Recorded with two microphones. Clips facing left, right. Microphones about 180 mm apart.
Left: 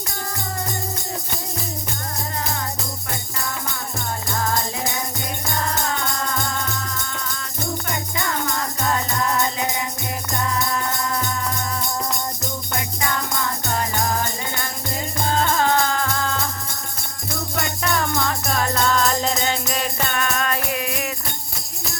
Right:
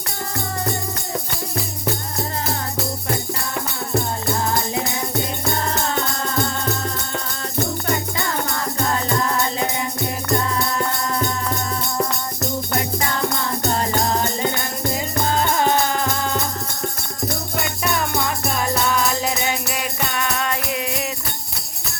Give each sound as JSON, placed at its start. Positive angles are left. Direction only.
{"t": 13.7, "sound": "music", "side_deg": -30}
{"t": 15.5, "sound": "music", "side_deg": -15}
{"t": 18.3, "sound": "music", "side_deg": -10}